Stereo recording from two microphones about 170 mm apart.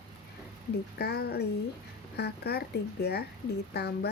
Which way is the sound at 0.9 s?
70° left (ahead or behind).